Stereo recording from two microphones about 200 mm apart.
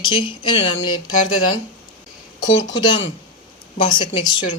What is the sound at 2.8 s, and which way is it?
Speech, 25° left (ahead or behind).